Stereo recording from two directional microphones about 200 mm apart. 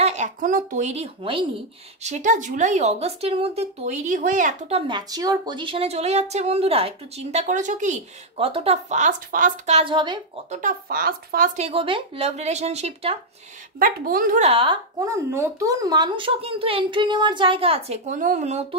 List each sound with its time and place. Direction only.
0.0 s speech: 35° right (ahead or behind)
10.5 s speech: 45° right (ahead or behind)
13.7 s a woman's voice: 45° right (ahead or behind)
14.5 s speech: 25° right (ahead or behind)